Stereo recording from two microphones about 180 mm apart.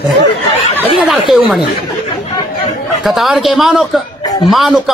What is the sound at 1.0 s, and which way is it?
Speech, centre (ahead or behind).